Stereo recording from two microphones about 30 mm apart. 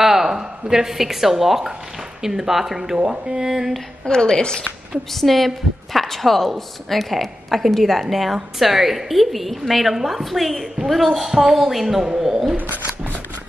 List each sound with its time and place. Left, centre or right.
0.0 s speech: centre
4.0 s a woman's voice: left
5.1 s a woman's voice: centre
12.5 s a sound: right